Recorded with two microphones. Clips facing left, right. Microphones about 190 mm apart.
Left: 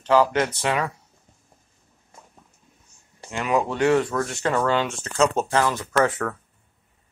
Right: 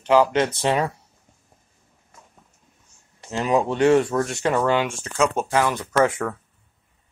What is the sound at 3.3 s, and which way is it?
Speech, 30° right (ahead or behind).